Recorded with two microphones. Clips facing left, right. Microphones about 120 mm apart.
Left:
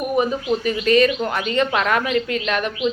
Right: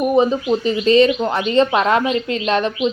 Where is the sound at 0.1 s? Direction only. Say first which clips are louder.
Right 2 dB; 25° right (ahead or behind).